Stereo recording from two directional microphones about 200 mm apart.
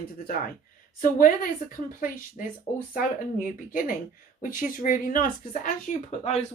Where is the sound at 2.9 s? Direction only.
45° left (ahead or behind).